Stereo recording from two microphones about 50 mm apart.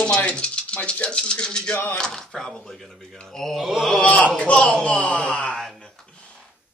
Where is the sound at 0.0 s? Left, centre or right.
Left; by 2.9 s centre.